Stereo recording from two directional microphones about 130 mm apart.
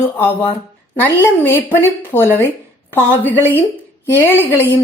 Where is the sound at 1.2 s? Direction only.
15° left (ahead or behind).